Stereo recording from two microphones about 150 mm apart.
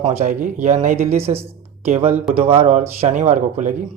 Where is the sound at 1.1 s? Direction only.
45° right (ahead or behind).